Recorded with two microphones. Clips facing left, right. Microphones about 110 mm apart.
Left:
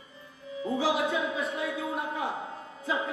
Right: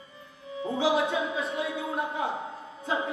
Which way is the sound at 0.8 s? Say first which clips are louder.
Right 3 dB; 30° right (ahead or behind).